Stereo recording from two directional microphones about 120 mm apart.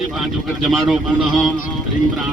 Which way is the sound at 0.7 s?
Centre (ahead or behind).